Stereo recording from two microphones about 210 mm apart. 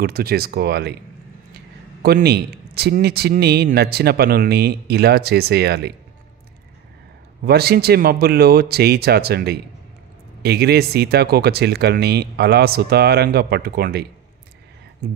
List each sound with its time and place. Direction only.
0.0 s speech: 45° right (ahead or behind)
2.0 s speech: 50° right (ahead or behind)
7.4 s speech: 50° right (ahead or behind)